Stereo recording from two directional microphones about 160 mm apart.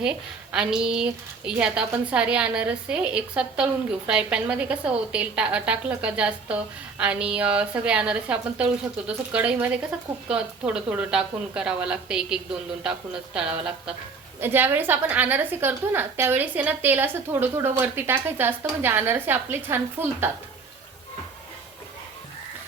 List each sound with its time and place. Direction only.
0.0 s a woman's voice: 5° right (ahead or behind)